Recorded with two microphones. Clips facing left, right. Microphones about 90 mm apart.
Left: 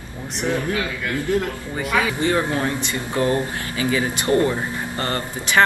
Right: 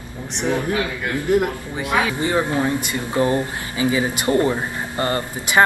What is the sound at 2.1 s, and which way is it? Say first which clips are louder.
Speech: even; 20° right (ahead or behind).